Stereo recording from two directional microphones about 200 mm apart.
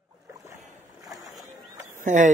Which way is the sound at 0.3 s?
15° right (ahead or behind).